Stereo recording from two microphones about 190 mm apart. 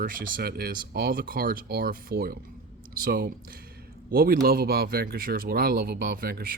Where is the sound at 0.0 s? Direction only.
50° right (ahead or behind).